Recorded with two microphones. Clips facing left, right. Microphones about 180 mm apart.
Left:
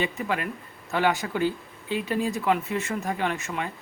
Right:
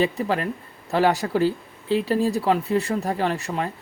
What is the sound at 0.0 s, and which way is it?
Speech, 35° right (ahead or behind).